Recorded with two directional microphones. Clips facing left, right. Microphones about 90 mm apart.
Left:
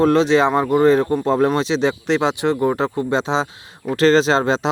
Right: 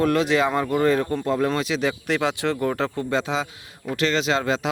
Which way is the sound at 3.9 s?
35° left (ahead or behind).